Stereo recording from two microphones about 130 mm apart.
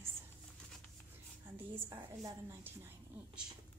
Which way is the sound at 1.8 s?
30° right (ahead or behind).